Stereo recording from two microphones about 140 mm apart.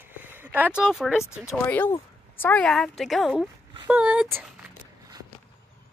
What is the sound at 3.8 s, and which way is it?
Speech, 10° right (ahead or behind).